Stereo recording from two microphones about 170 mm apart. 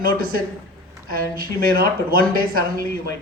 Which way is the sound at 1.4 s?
60° right (ahead or behind).